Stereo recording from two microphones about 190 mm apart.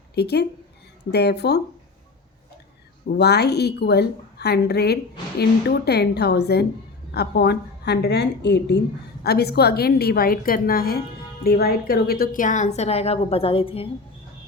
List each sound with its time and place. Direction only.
0.1 s a woman's voice: 60° left (ahead or behind)
3.1 s a woman's voice: 60° left (ahead or behind); by 13.8 s 30° left (ahead or behind)